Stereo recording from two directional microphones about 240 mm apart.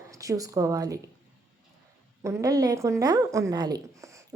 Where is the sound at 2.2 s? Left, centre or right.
Centre.